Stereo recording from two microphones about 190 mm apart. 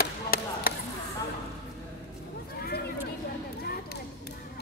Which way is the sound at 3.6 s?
55° left (ahead or behind).